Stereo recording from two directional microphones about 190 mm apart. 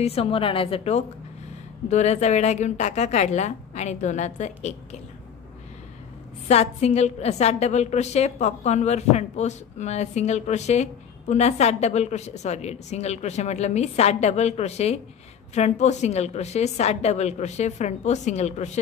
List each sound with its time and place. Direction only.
0.0 s a woman's voice: 30° left (ahead or behind)
6.4 s a woman's voice: 35° left (ahead or behind)